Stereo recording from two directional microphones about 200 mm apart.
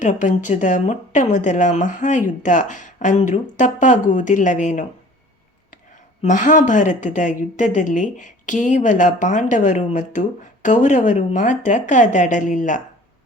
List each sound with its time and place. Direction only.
0.0 s speech: 40° left (ahead or behind)
6.2 s speech: 40° left (ahead or behind)